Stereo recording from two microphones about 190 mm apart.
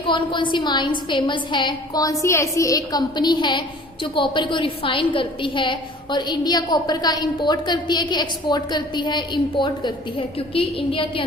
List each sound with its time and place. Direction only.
0.1 s a woman's voice: 25° left (ahead or behind)